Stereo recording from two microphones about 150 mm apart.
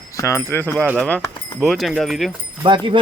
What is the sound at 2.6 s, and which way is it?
Speech, 35° right (ahead or behind).